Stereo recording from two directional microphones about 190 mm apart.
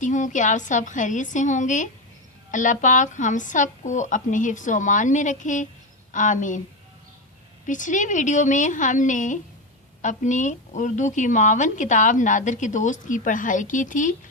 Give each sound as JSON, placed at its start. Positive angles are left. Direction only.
{"t": 0.0, "sound": "a woman's voice", "side_deg": 40}
{"t": 7.7, "sound": "a woman's voice", "side_deg": 40}